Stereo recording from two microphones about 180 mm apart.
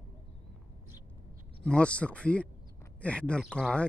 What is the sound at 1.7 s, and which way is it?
Speech, 5° left (ahead or behind).